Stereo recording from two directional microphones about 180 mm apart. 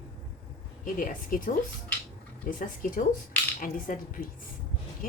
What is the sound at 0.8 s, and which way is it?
A woman's voice, 50° left (ahead or behind).